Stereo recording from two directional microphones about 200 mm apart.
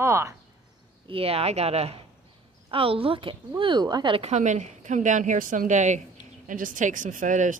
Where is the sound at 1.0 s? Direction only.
30° right (ahead or behind).